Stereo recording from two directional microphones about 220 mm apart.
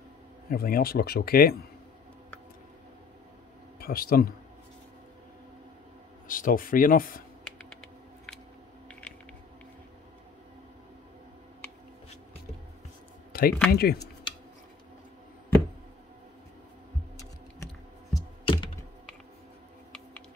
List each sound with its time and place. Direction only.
0.5 s speech: 40° left (ahead or behind)
3.8 s speech: 40° left (ahead or behind)
6.2 s speech: 40° left (ahead or behind)
13.3 s a sound: 45° left (ahead or behind)
13.7 s speech: 45° left (ahead or behind)
18.1 s computer keyboard: 20° left (ahead or behind)